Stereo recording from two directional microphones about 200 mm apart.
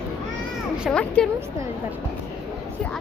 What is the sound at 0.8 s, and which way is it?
Speech, 5° left (ahead or behind).